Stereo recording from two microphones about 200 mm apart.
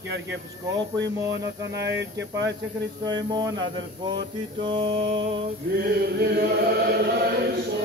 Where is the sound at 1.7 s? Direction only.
60° right (ahead or behind).